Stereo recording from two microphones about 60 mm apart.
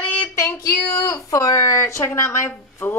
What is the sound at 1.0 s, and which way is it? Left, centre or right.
Speech, left.